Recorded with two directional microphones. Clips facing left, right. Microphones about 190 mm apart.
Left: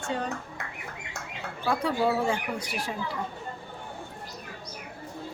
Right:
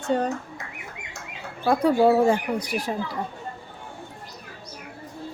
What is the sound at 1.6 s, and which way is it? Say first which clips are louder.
Speech: right 8 dB; 40° right (ahead or behind).